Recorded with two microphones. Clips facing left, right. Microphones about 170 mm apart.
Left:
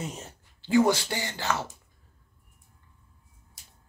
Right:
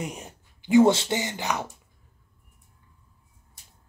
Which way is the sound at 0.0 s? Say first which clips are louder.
Right 2 dB; 15° right (ahead or behind).